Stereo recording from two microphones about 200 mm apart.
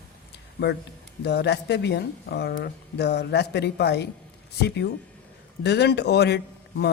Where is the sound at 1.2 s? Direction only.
55° left (ahead or behind).